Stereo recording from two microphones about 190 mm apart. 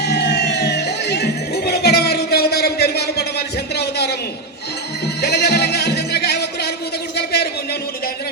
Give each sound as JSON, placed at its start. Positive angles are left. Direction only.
{"t": 0.0, "sound": "emergency vehicle", "side_deg": 60}
{"t": 5.2, "sound": "music", "side_deg": 60}
{"t": 7.2, "sound": "a sound", "side_deg": 55}